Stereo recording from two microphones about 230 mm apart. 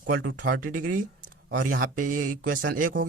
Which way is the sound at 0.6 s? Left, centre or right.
Right.